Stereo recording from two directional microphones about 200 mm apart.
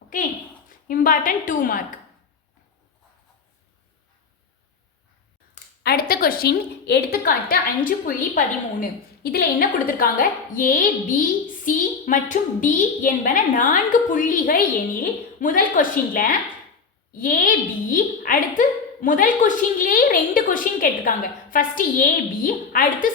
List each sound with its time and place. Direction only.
0.1 s a woman's voice: 40° left (ahead or behind)
5.8 s a woman's voice: 50° left (ahead or behind)